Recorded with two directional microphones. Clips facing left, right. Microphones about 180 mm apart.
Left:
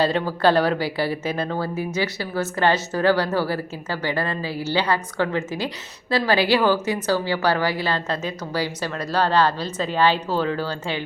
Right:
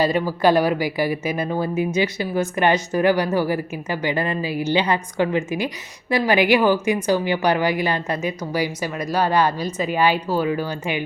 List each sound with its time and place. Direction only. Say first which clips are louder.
0.0 s a woman's voice: right 1 dB; 10° right (ahead or behind)